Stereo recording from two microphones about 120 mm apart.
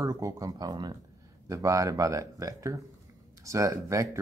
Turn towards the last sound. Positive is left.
turn(degrees=-25)  # may be behind; listen again after turning